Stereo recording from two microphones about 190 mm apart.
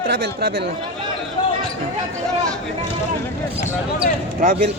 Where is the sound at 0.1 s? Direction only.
55° right (ahead or behind).